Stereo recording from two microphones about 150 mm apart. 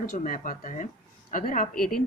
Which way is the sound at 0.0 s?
60° left (ahead or behind).